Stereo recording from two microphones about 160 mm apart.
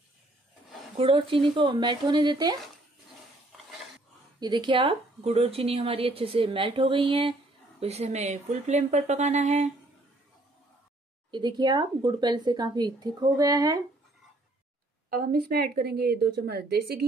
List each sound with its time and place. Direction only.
0.9 s speech: 35° right (ahead or behind)
4.4 s a woman's voice: 25° right (ahead or behind); by 9.7 s 45° right (ahead or behind)
11.2 s speech: 30° right (ahead or behind)
15.0 s a woman's voice: 70° right (ahead or behind); by 17.0 s 85° right